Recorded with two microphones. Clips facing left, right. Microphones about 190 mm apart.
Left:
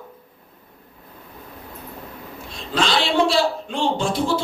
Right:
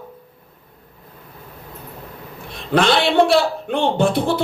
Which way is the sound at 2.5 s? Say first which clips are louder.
Right 6 dB; 60° right (ahead or behind).